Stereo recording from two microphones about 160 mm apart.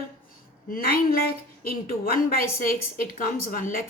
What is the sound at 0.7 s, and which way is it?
A woman's voice, 75° left (ahead or behind).